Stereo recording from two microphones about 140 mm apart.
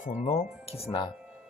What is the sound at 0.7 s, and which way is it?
Speech, 40° left (ahead or behind).